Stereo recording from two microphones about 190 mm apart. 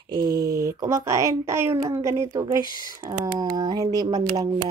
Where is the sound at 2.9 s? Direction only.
15° right (ahead or behind).